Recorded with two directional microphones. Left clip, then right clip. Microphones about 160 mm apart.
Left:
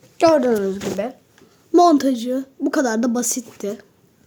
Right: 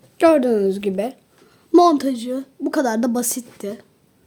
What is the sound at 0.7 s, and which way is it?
Speech, 35° right (ahead or behind).